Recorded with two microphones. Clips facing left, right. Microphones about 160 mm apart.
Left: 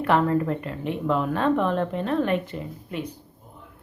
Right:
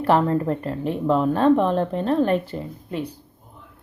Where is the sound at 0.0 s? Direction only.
30° right (ahead or behind).